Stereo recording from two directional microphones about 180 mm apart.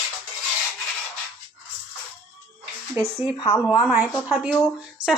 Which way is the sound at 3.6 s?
5° right (ahead or behind).